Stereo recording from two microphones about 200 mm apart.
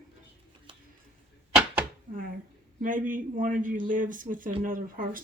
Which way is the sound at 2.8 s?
40° right (ahead or behind).